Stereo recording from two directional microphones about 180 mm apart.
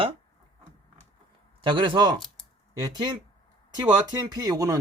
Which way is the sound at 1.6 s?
25° right (ahead or behind).